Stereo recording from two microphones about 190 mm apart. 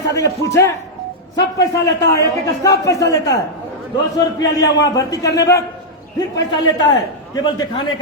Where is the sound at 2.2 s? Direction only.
15° left (ahead or behind).